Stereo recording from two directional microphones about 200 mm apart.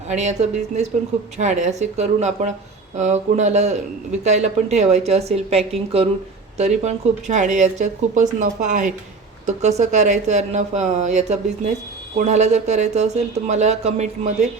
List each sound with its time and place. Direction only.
0.1 s speech: 35° right (ahead or behind)